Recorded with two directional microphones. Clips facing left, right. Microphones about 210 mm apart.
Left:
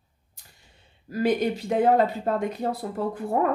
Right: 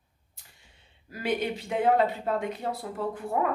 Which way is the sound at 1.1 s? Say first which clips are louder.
Left 6 dB; 40° left (ahead or behind).